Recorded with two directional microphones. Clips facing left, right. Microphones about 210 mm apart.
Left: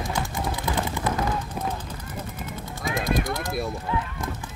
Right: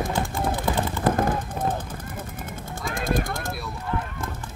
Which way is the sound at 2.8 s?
50° right (ahead or behind).